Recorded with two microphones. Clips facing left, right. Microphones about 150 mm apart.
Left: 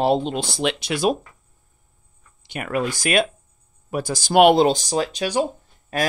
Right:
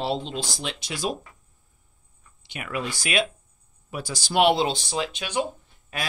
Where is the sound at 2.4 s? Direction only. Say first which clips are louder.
Left 7 dB; 50° left (ahead or behind).